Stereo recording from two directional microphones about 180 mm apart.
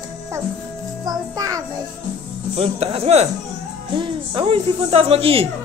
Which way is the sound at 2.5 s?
35° right (ahead or behind).